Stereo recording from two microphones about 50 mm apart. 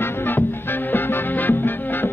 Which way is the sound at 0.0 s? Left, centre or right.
Left.